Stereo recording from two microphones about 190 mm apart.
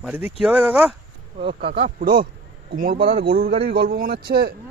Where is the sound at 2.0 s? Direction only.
50° right (ahead or behind).